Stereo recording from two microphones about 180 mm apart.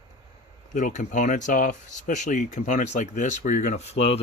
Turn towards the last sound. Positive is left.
turn(degrees=35)  # may be behind; listen again after turning